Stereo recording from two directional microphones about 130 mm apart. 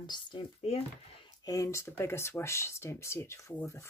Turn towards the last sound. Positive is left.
turn(degrees=20)  # may be behind; listen again after turning